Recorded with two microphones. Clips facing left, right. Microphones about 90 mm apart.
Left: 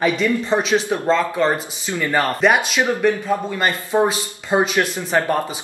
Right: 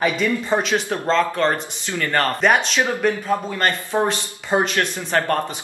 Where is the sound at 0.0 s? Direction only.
Centre (ahead or behind).